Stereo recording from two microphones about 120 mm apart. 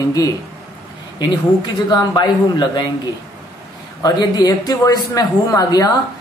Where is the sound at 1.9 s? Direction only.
35° left (ahead or behind).